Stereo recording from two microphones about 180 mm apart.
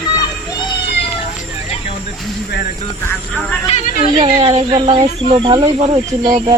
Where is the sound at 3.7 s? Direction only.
45° left (ahead or behind).